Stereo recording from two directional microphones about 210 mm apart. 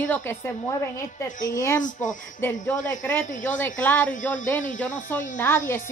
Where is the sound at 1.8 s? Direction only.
35° left (ahead or behind).